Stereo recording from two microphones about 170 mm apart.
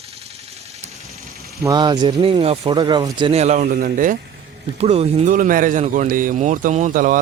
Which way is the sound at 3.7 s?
55° right (ahead or behind).